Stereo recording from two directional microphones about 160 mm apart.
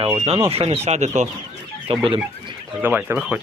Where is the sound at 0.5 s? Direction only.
35° right (ahead or behind).